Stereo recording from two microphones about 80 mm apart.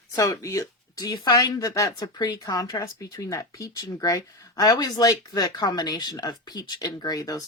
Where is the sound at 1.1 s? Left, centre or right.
Left.